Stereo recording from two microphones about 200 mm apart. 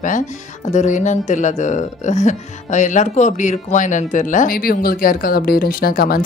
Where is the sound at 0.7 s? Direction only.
35° left (ahead or behind).